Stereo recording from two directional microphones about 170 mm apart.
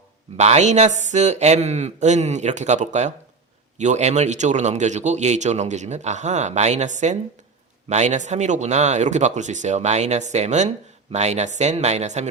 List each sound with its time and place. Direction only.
0.3 s speech: 40° right (ahead or behind)